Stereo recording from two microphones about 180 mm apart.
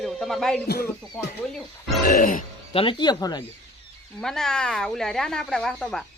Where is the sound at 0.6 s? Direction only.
60° left (ahead or behind).